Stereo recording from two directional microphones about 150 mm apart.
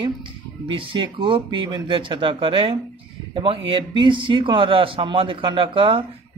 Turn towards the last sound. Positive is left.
turn(degrees=-35)  # may be behind; listen again after turning